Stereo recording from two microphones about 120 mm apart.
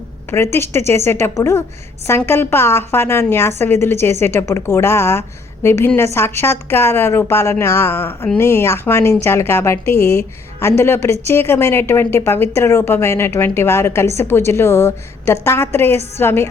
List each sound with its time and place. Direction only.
0.3 s a woman's voice: 20° left (ahead or behind)